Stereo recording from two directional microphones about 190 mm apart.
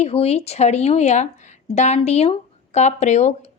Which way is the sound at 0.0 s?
30° left (ahead or behind).